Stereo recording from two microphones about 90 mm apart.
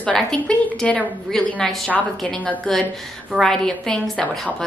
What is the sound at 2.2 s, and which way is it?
A woman's voice, 15° left (ahead or behind).